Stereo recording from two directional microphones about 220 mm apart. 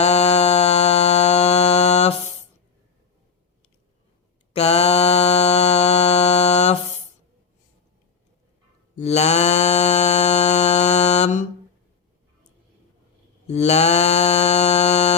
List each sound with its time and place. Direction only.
0.0 s a sound: 30° left (ahead or behind)
4.5 s mantra: 30° left (ahead or behind)
9.0 s mantra: 30° left (ahead or behind)
13.5 s mantra: 30° left (ahead or behind)